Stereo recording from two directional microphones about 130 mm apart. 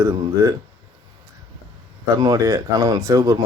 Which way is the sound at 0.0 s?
30° right (ahead or behind).